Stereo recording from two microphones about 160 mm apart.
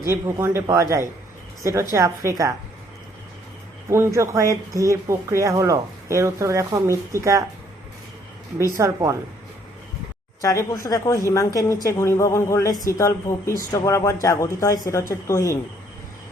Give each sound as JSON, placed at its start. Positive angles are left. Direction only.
{"t": 0.0, "sound": "speech", "side_deg": -15}
{"t": 3.8, "sound": "speech", "side_deg": -15}
{"t": 8.8, "sound": "speech", "side_deg": -20}
{"t": 10.4, "sound": "a woman's voice", "side_deg": 20}